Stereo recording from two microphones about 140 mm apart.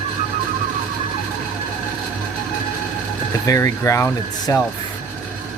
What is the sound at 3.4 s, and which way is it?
Speech, 25° left (ahead or behind).